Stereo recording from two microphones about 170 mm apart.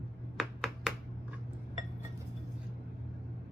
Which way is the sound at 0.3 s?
Centre (ahead or behind).